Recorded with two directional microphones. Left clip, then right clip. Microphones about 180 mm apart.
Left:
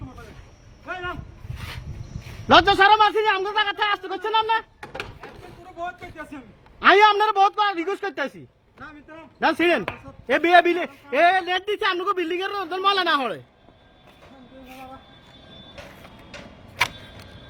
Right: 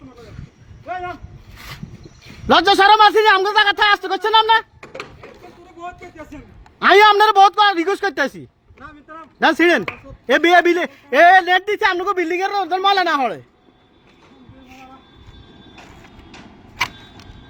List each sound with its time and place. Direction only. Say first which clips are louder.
2.5 s a man's voice: right 3 dB; 35° right (ahead or behind)
4.8 s a sound: right 1 dB; centre (ahead or behind)
6.7 s a woman's voice: right 5 dB; 45° right (ahead or behind)
9.4 s a woman's voice: right 6 dB; 30° right (ahead or behind)
11.1 s a man's voice: right 8 dB; 40° right (ahead or behind); by 13.4 s 20° right (ahead or behind)